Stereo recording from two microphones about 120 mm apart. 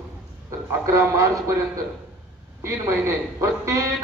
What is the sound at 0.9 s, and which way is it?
Speech, 25° right (ahead or behind).